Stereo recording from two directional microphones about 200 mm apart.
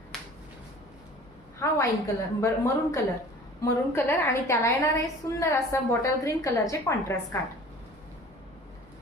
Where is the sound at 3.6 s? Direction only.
15° left (ahead or behind).